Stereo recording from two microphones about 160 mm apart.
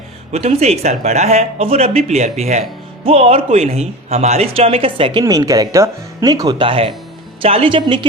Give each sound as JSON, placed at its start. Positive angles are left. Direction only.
{"t": 0.3, "sound": "speech", "side_deg": -45}
{"t": 5.2, "sound": "a woman's voice", "side_deg": -20}